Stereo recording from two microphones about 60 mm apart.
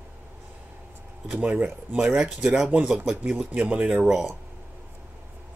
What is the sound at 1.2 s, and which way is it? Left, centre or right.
Speech, right.